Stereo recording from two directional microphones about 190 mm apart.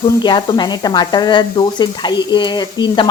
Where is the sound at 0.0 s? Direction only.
25° left (ahead or behind).